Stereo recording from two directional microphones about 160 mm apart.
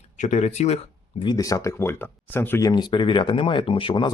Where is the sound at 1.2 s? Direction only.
20° left (ahead or behind).